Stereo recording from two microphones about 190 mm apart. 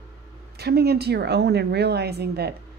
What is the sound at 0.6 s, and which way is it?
Speech, 60° right (ahead or behind).